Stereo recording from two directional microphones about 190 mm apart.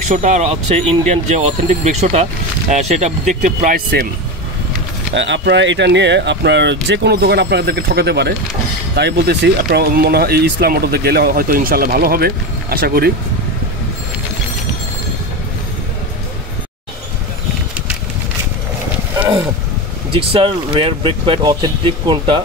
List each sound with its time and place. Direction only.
0.1 s speech: 35° right (ahead or behind)
5.1 s speech: 70° right (ahead or behind); by 13.1 s 55° right (ahead or behind)
20.1 s speech: 30° right (ahead or behind)